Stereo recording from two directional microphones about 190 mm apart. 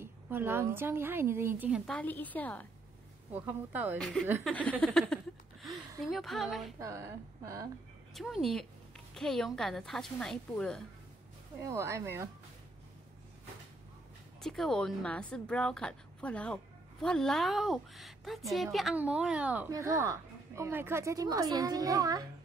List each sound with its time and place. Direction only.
0.0 s a woman's voice: 10° right (ahead or behind)
1.9 s a woman's voice: 10° left (ahead or behind)
3.3 s a woman's voice: 10° right (ahead or behind)
4.5 s a woman's voice: 5° left (ahead or behind)
5.1 s a sound: centre (ahead or behind)
6.0 s a woman's voice: centre (ahead or behind)
6.8 s a woman's voice: 15° right (ahead or behind)
8.1 s a woman's voice: centre (ahead or behind)
11.6 s a woman's voice: 15° right (ahead or behind)
14.4 s a woman's voice: centre (ahead or behind); by 22.3 s 20° right (ahead or behind)